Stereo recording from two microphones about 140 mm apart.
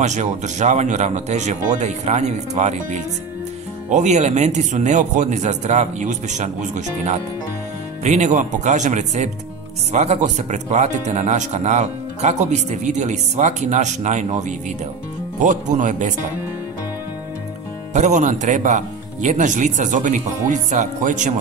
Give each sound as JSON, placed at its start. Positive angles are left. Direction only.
{"t": 0.0, "sound": "speech", "side_deg": -55}
{"t": 17.9, "sound": "speech", "side_deg": -60}